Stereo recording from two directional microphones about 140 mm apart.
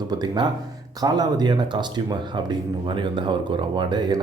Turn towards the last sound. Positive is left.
turn(degrees=-30)  # may be behind; listen again after turning